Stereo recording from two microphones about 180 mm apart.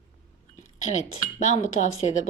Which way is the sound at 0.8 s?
40° left (ahead or behind).